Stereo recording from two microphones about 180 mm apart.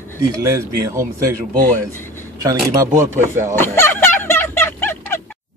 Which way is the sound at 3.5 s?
10° left (ahead or behind).